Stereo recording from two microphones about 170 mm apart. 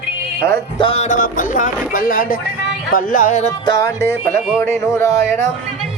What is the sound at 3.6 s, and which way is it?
Music, 20° left (ahead or behind).